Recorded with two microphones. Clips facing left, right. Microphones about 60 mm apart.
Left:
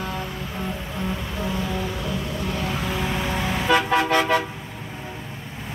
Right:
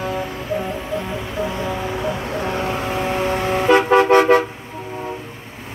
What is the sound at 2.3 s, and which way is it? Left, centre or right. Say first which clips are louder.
Vehicle: right 5 dB; right.